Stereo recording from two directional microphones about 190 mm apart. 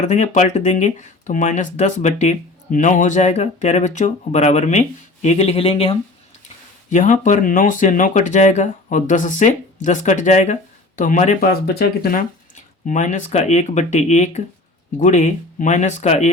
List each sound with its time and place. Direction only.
0.0 s speech: 40° left (ahead or behind)